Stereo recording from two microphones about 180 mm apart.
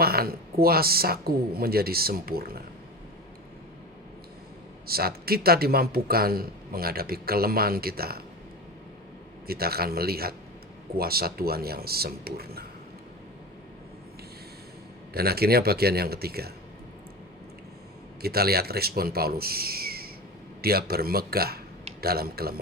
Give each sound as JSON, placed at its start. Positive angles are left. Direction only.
{"t": 0.0, "sound": "a sound", "side_deg": -60}
{"t": 0.6, "sound": "speech", "side_deg": -55}
{"t": 4.9, "sound": "speech", "side_deg": -60}
{"t": 9.5, "sound": "speech", "side_deg": -60}
{"t": 15.1, "sound": "speech", "side_deg": -60}
{"t": 18.2, "sound": "speech", "side_deg": -60}